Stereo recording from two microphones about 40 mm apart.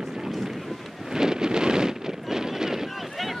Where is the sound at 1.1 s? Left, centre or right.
Centre.